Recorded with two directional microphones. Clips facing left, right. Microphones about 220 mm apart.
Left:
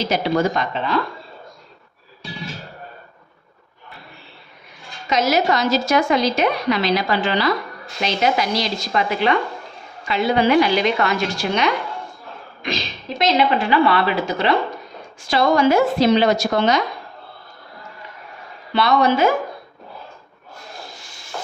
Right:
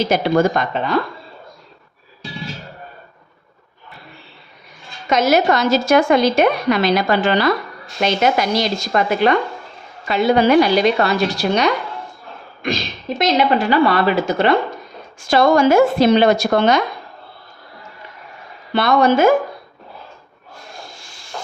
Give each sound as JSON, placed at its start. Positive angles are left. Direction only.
{"t": 0.1, "sound": "a woman's voice", "side_deg": -50}
{"t": 5.0, "sound": "a woman's voice", "side_deg": -50}
{"t": 13.1, "sound": "a woman's voice", "side_deg": -45}
{"t": 18.7, "sound": "a woman's voice", "side_deg": -50}